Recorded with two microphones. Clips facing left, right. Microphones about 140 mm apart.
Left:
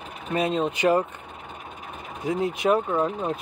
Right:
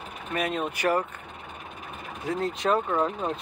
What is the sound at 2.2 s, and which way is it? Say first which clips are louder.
Speech: left 3 dB; 15° left (ahead or behind).